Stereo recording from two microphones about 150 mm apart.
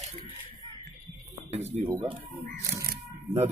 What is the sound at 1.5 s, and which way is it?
Speech, 45° right (ahead or behind).